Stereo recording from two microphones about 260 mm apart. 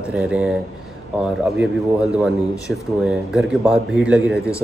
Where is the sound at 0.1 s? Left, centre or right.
Centre.